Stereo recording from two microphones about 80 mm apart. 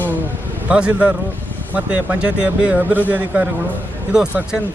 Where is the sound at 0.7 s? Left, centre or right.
Centre.